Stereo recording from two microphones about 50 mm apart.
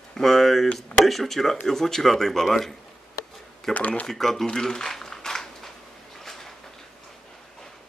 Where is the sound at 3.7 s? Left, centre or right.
Left.